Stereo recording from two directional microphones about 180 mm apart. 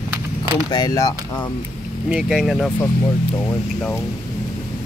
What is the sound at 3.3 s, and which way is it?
Speech, 15° left (ahead or behind).